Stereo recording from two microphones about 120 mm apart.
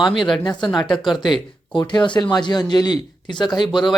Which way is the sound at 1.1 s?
40° left (ahead or behind).